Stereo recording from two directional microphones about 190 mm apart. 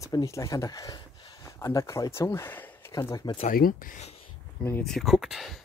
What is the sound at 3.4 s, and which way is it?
Speech, 50° left (ahead or behind).